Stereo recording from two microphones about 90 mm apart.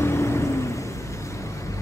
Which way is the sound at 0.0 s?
30° left (ahead or behind).